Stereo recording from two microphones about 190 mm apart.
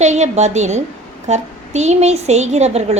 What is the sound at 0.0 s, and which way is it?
A woman's voice, 35° right (ahead or behind).